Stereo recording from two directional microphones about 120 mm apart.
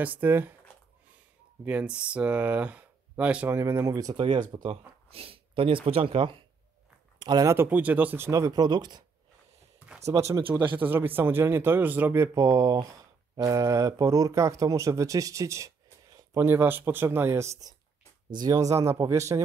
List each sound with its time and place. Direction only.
0.0 s speech: 15° right (ahead or behind)
1.6 s speech: 10° right (ahead or behind)
3.5 s speech: 20° right (ahead or behind)
4.5 s speech: 50° right (ahead or behind)
7.2 s speech: 35° right (ahead or behind)
7.5 s speech: 15° right (ahead or behind)
8.3 s speech: 30° right (ahead or behind)
9.9 s speech: 25° right (ahead or behind)
10.4 s speech: 15° right (ahead or behind)
16.4 s speech: 20° right (ahead or behind)